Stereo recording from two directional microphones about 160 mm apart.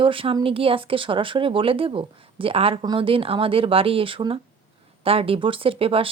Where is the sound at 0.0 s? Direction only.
35° right (ahead or behind).